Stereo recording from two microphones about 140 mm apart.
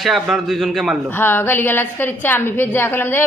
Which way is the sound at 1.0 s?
15° left (ahead or behind).